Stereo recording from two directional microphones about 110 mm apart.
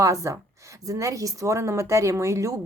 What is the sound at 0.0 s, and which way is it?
A woman's voice, 30° right (ahead or behind).